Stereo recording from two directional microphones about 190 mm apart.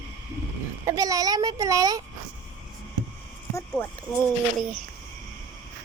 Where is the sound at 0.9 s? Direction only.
20° right (ahead or behind).